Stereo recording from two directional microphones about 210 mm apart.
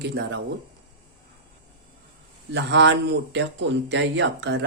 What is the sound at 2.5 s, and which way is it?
Speech, 55° right (ahead or behind).